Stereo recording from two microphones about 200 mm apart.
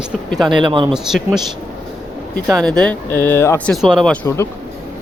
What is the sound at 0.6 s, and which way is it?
Speech, 25° right (ahead or behind).